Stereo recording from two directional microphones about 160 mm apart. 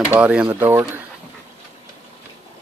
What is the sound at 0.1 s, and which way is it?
Speech, 10° right (ahead or behind).